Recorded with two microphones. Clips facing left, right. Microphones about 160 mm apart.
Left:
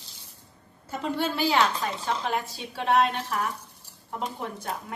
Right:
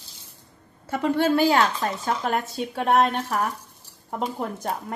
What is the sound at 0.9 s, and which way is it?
A woman's voice, 60° right (ahead or behind).